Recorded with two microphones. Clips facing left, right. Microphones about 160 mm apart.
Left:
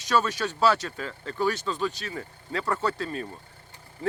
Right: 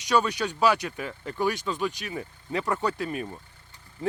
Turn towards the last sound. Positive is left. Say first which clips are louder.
# even
turn(degrees=-15)  # may be behind; listen again after turning